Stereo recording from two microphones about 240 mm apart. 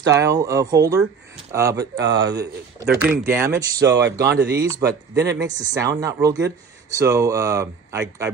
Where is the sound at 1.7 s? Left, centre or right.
Right.